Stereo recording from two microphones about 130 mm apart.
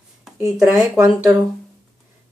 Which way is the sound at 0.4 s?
20° right (ahead or behind).